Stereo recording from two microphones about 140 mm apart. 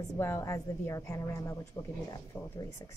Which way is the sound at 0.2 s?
20° left (ahead or behind).